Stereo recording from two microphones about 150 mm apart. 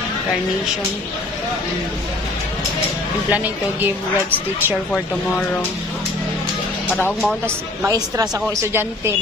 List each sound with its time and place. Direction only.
3.3 s speech: 10° right (ahead or behind)
7.2 s speech: 5° left (ahead or behind)
7.8 s speech: 25° right (ahead or behind)